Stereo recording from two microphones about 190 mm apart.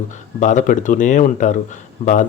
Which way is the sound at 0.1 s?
40° left (ahead or behind).